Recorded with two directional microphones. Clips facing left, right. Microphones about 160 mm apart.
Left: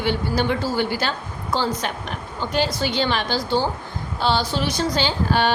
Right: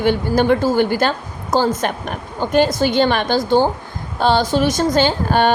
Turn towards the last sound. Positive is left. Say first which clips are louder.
# right 5 dB
turn(degrees=-50)  # may be behind; listen again after turning